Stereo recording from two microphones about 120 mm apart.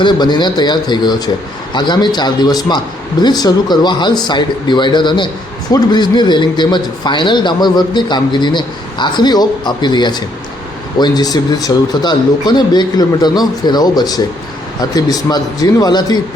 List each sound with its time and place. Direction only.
0.0 s a man's voice: 40° left (ahead or behind)